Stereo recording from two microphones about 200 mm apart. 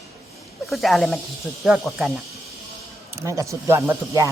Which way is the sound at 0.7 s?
Centre (ahead or behind).